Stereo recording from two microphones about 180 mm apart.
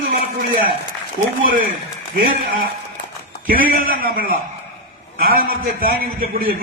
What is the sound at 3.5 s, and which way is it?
A man's voice, 55° right (ahead or behind).